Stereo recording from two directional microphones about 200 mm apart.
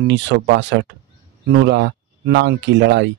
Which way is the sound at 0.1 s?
60° right (ahead or behind).